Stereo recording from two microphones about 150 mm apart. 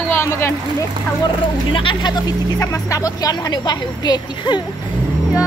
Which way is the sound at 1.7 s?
30° left (ahead or behind).